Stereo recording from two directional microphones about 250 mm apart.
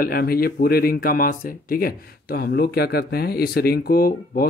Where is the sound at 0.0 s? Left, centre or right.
Left.